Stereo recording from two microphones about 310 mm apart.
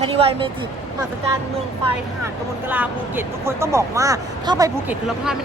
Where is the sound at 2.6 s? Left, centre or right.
Centre.